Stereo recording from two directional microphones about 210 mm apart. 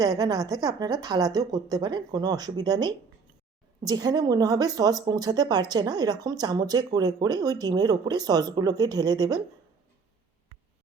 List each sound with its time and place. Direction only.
0.0 s a woman's voice: 15° right (ahead or behind)